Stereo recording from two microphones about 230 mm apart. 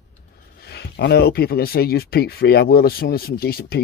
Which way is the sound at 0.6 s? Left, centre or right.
Left.